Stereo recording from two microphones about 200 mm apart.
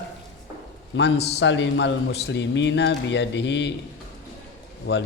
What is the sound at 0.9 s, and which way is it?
Speech, 55° left (ahead or behind).